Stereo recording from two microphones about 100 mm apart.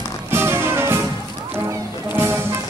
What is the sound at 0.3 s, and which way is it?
Music, 25° right (ahead or behind).